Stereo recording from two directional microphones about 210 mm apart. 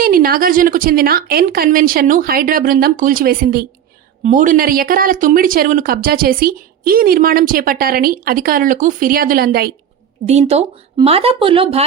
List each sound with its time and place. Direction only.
0.0 s speech: 45° right (ahead or behind)
10.2 s speech: 30° right (ahead or behind)